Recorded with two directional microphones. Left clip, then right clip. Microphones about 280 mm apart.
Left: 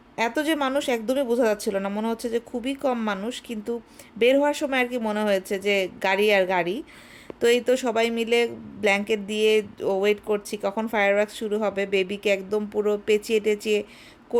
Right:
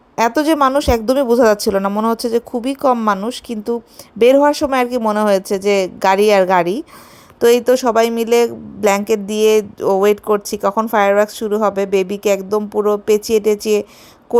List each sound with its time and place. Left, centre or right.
0.2 s a woman's voice: centre